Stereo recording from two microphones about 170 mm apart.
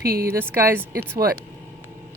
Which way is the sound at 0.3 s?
15° right (ahead or behind).